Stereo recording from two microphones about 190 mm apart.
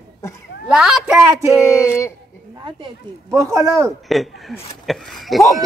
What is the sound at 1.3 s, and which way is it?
Speech, 15° right (ahead or behind).